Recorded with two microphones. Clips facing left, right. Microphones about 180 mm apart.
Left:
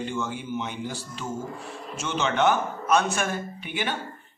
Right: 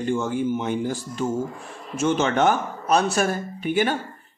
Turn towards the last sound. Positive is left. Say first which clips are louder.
# right 8 dB
turn(degrees=-45)  # may be behind; listen again after turning